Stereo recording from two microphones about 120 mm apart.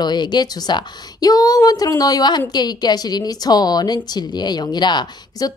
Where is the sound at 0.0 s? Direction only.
35° left (ahead or behind).